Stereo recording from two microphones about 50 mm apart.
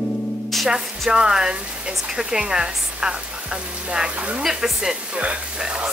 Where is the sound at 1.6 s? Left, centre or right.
Right.